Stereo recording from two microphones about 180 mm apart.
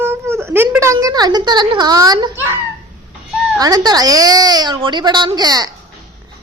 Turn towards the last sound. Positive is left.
turn(degrees=-20)  # may be behind; listen again after turning